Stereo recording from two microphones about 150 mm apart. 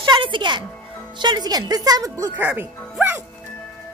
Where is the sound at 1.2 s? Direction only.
30° right (ahead or behind).